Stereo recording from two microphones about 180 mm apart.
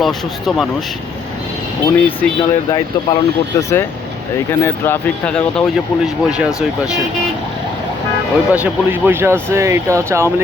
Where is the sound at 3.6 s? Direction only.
15° left (ahead or behind).